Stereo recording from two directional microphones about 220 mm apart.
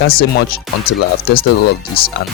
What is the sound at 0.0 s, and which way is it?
Speech, 45° left (ahead or behind).